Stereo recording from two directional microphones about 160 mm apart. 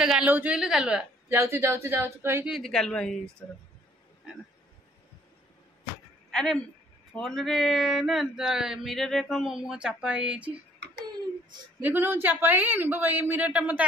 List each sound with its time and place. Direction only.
0.0 s speech: 5° right (ahead or behind)
1.3 s speech: 15° right (ahead or behind)
2.5 s speech: 5° left (ahead or behind)
6.3 s speech: 5° left (ahead or behind)
11.8 s speech: 15° right (ahead or behind)